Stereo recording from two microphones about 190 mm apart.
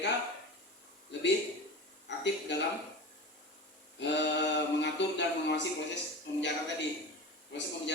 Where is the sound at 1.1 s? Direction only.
70° left (ahead or behind).